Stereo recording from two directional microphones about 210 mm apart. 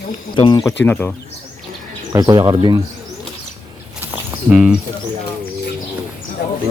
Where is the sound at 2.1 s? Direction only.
15° right (ahead or behind).